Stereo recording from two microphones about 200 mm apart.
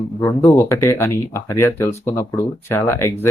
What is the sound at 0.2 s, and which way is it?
Speech, 10° left (ahead or behind).